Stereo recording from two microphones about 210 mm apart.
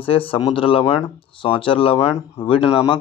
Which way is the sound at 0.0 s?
25° left (ahead or behind).